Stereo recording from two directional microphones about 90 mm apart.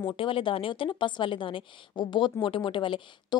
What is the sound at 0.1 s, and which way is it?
A woman's voice, 75° left (ahead or behind).